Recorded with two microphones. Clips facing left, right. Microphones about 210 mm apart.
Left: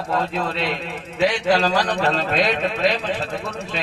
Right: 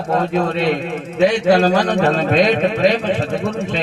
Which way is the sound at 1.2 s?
40° right (ahead or behind).